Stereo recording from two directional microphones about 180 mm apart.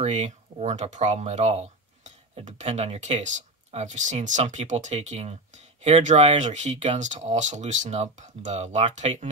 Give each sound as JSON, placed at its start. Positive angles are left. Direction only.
{"t": 0.0, "sound": "speech", "side_deg": -40}